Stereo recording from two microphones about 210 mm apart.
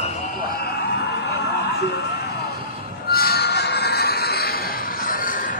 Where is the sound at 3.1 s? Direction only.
50° left (ahead or behind).